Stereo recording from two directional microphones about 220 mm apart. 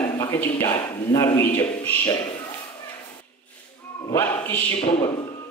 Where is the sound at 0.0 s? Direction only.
10° left (ahead or behind).